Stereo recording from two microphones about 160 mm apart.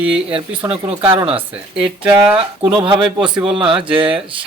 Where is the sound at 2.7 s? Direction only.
30° right (ahead or behind).